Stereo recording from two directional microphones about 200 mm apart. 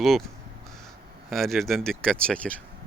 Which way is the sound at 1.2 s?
Centre (ahead or behind).